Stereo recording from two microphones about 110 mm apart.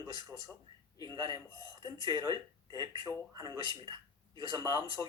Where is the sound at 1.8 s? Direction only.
40° right (ahead or behind).